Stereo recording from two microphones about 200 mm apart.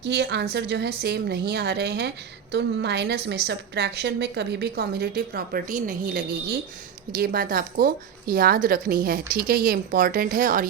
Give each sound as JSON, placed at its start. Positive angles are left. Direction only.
{"t": 0.0, "sound": "a woman's voice", "side_deg": -55}